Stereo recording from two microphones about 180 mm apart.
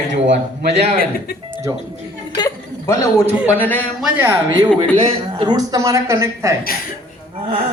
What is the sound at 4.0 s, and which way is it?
Speech, 10° right (ahead or behind).